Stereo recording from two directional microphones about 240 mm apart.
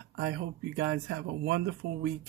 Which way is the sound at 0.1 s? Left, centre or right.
Right.